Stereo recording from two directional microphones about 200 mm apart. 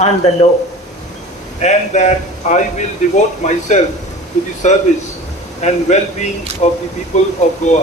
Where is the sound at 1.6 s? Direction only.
35° left (ahead or behind).